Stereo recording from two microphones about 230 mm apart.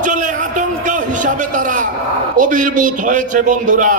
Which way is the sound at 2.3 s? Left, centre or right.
Right.